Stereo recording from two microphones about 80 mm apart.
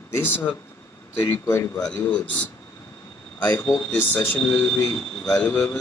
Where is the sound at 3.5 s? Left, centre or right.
Left.